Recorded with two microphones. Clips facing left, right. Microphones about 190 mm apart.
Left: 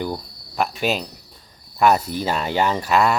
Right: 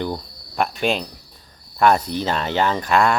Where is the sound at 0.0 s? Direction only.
5° left (ahead or behind).